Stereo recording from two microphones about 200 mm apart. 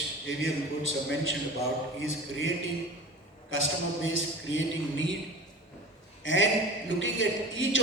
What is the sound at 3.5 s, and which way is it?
A man's voice, 75° left (ahead or behind).